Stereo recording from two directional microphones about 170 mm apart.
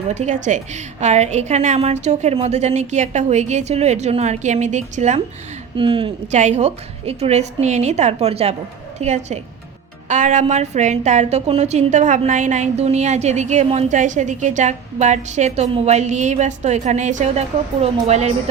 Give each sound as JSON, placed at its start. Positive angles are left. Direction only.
{"t": 0.1, "sound": "a woman's voice", "side_deg": -45}
{"t": 5.7, "sound": "a woman's voice", "side_deg": -30}
{"t": 6.3, "sound": "a woman's voice", "side_deg": -45}